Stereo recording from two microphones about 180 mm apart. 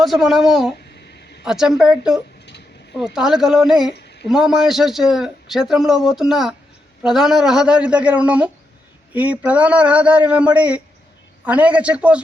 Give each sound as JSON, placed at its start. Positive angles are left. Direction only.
{"t": 0.0, "sound": "speech", "side_deg": 0}
{"t": 3.9, "sound": "a sound", "side_deg": 70}
{"t": 4.3, "sound": "speech", "side_deg": 0}